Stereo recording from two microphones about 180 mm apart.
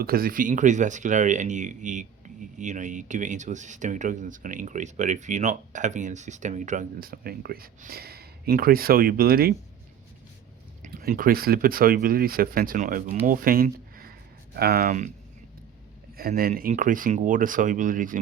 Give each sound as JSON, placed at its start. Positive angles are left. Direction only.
{"t": 0.0, "sound": "speech", "side_deg": -55}
{"t": 10.8, "sound": "speech", "side_deg": -50}
{"t": 13.2, "sound": "a sound", "side_deg": -50}
{"t": 16.1, "sound": "speech", "side_deg": -55}